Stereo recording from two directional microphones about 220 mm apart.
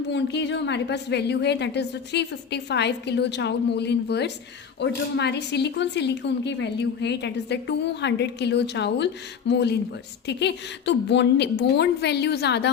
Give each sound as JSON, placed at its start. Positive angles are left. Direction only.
{"t": 0.1, "sound": "speech", "side_deg": 50}